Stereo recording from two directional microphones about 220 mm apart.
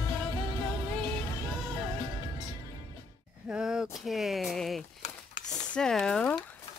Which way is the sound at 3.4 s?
5° right (ahead or behind).